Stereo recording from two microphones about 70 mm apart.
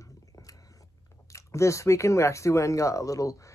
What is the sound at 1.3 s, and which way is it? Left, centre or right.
Speech, left.